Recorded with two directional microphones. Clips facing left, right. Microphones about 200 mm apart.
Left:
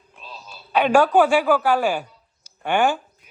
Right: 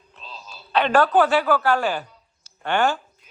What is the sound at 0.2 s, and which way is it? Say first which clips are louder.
A man's voice: left 1 dB; 10° left (ahead or behind).